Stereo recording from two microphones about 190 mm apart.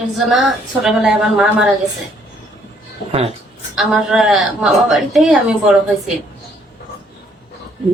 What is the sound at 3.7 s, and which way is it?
A woman's voice, centre (ahead or behind).